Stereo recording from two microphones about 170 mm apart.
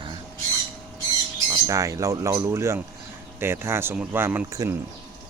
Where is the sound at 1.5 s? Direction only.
20° right (ahead or behind).